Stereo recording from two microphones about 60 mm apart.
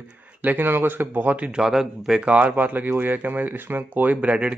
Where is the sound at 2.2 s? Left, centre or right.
Right.